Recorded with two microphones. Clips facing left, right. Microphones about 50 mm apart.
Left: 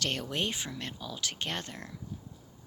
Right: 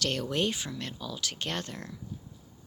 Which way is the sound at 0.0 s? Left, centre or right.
Left.